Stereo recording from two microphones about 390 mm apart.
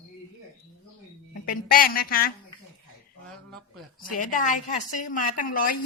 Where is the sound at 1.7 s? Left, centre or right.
Left.